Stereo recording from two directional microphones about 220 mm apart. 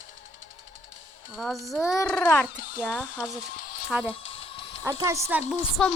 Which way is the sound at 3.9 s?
5° right (ahead or behind).